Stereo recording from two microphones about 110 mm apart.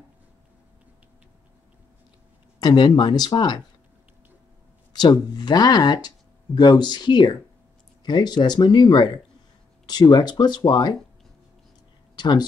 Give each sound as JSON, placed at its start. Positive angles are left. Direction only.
{"t": 2.6, "sound": "speech", "side_deg": 40}
{"t": 4.9, "sound": "speech", "side_deg": 40}
{"t": 12.2, "sound": "speech", "side_deg": 40}